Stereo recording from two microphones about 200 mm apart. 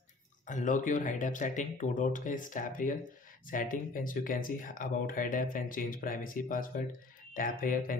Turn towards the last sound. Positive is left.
turn(degrees=45)  # may be behind; listen again after turning